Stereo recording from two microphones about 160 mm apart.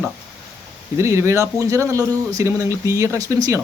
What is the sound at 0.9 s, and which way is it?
Speech, 15° right (ahead or behind).